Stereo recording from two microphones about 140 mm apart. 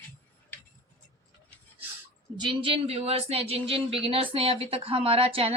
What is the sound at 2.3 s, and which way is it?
Speech, 40° right (ahead or behind).